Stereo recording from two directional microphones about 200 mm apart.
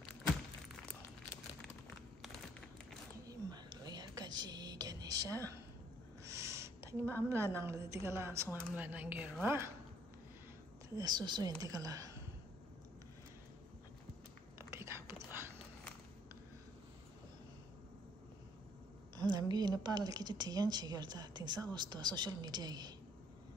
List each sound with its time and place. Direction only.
3.3 s whispering: 20° right (ahead or behind)
6.2 s a sound: 15° right (ahead or behind)
7.2 s a woman's voice: 15° right (ahead or behind)
11.0 s a woman's voice: 20° right (ahead or behind)
14.6 s a sound: 15° right (ahead or behind)
19.1 s a woman's voice: 20° right (ahead or behind)